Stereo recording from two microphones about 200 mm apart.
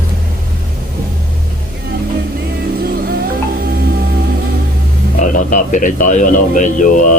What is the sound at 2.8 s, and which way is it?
Music, 50° right (ahead or behind).